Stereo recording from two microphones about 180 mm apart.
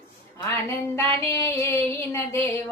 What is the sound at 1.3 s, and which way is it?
Female singing, 15° left (ahead or behind).